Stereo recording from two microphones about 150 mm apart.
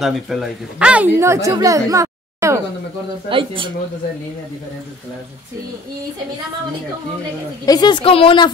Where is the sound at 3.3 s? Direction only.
35° right (ahead or behind).